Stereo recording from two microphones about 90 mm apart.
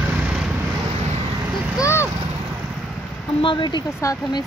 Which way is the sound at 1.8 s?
30° left (ahead or behind).